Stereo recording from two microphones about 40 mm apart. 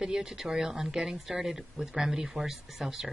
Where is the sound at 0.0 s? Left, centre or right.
Centre.